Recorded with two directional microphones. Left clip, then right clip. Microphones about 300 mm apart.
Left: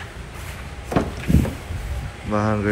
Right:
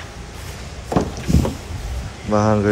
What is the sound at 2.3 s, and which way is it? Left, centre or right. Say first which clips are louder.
Speech: right 5 dB; centre.